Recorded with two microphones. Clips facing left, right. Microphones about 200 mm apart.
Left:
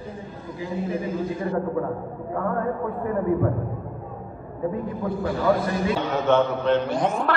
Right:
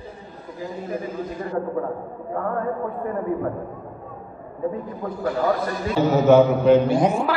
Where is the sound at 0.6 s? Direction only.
45° right (ahead or behind).